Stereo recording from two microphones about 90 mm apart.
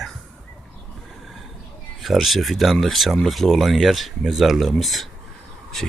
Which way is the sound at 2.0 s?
Centre (ahead or behind).